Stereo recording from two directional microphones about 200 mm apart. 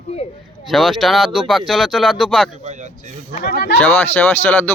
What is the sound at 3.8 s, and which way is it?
Speech, 10° left (ahead or behind).